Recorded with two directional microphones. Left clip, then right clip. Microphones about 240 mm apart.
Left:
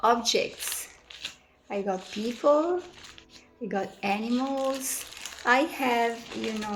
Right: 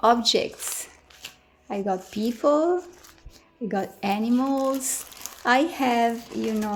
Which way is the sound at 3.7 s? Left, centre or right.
Right.